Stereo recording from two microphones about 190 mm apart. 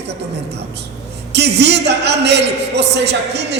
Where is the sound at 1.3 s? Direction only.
60° right (ahead or behind).